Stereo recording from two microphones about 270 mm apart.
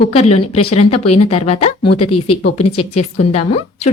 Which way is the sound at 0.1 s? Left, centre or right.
Left.